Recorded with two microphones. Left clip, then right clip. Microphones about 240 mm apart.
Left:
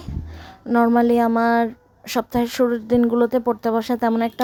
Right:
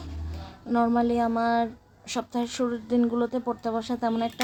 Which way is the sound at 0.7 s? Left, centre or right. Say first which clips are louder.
Left 7 dB; left.